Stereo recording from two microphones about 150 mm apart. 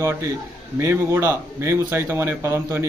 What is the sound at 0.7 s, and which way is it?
A man's voice, 15° right (ahead or behind).